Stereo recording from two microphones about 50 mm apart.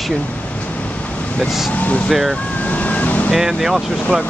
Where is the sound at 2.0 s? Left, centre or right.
Centre.